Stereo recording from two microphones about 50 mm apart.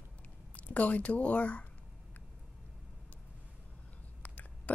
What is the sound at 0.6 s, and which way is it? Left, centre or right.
Speech, left.